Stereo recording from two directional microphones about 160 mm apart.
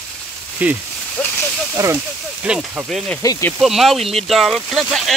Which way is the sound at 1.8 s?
20° right (ahead or behind).